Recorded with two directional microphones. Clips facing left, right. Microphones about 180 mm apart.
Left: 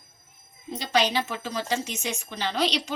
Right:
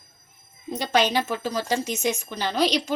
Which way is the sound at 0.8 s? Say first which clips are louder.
Right 2 dB; 50° right (ahead or behind).